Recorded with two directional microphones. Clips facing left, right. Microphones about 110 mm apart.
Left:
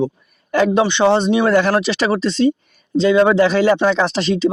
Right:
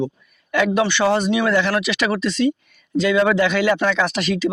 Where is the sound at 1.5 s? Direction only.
40° left (ahead or behind).